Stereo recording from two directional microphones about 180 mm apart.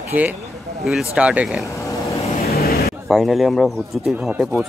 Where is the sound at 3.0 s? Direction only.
Centre (ahead or behind).